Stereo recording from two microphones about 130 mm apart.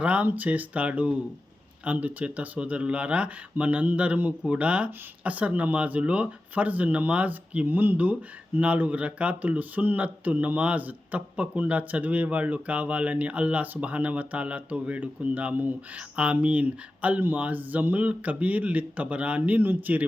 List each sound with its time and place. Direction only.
0.0 s speech: 10° right (ahead or behind)